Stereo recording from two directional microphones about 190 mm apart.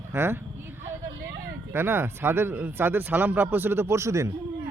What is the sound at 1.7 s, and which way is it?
A man's voice, 10° right (ahead or behind).